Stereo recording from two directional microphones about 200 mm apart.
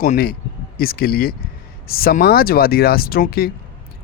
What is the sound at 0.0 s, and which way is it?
A man's voice, 45° left (ahead or behind).